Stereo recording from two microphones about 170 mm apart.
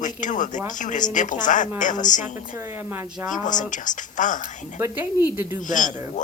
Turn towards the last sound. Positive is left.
turn(degrees=50)  # may be behind; listen again after turning